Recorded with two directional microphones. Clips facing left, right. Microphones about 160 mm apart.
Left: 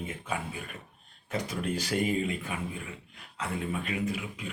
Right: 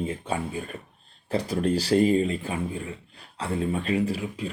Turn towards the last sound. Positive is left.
turn(degrees=-35)  # may be behind; listen again after turning